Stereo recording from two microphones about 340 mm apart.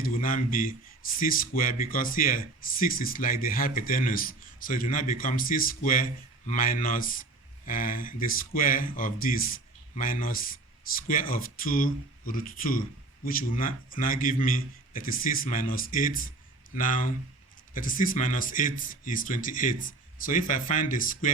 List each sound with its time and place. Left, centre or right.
0.0 s speech: left